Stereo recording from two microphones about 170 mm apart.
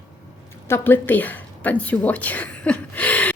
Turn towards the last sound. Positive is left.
turn(degrees=10)  # may be behind; listen again after turning